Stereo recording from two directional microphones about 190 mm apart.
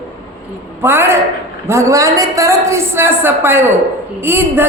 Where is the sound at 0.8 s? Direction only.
10° right (ahead or behind).